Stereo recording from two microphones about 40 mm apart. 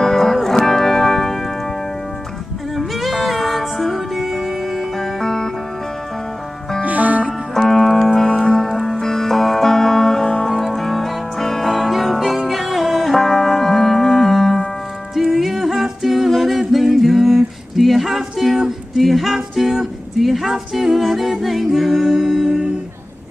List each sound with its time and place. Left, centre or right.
0.0 s music: centre
2.7 s music: centre
6.8 s music: right
7.5 s music: centre
15.3 s a capella: centre
17.7 s music: centre
19.8 s humming: centre